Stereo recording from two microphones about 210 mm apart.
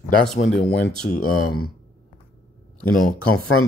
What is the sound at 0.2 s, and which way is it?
Speech, centre (ahead or behind).